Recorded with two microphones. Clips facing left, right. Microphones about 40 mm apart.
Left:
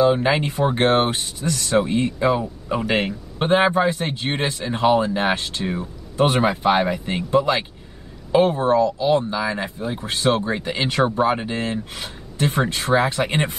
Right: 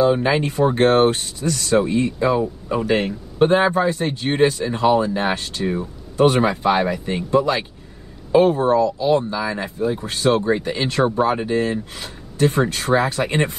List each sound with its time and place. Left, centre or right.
0.1 s a man's voice: left
3.4 s speech: left
4.0 s speech: centre
8.9 s speech: centre